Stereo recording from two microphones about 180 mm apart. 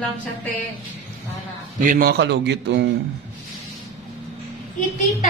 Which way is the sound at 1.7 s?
50° right (ahead or behind).